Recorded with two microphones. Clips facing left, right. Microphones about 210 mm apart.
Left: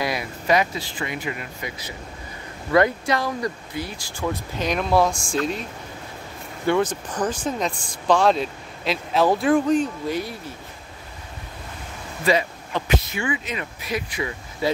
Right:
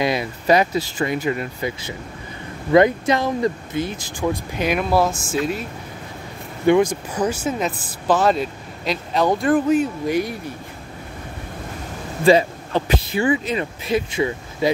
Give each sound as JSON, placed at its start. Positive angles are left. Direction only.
{"t": 0.0, "sound": "speech", "side_deg": -25}
{"t": 2.7, "sound": "speech", "side_deg": -20}
{"t": 12.3, "sound": "speech", "side_deg": -35}